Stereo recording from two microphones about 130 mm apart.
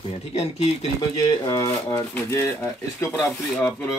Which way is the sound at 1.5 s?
30° left (ahead or behind).